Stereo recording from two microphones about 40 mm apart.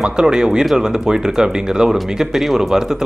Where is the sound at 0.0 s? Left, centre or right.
Centre.